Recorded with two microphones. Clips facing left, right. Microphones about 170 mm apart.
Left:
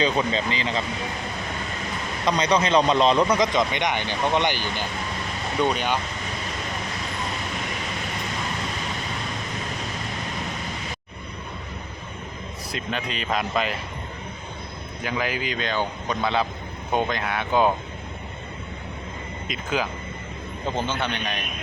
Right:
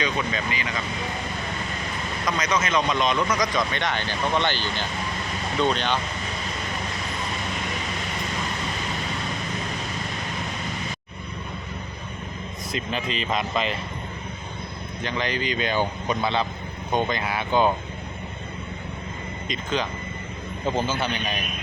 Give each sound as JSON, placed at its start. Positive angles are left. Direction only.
{"t": 0.0, "sound": "speech", "side_deg": 30}
{"t": 2.2, "sound": "speech", "side_deg": 30}
{"t": 12.7, "sound": "speech", "side_deg": 0}
{"t": 15.0, "sound": "speech", "side_deg": 5}
{"t": 19.5, "sound": "speech", "side_deg": 5}